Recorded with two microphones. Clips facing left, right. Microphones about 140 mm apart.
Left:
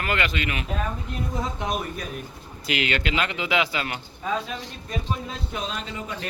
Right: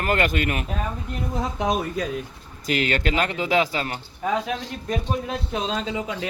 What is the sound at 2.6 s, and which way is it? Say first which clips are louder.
Speech: right 3 dB; 40° right (ahead or behind).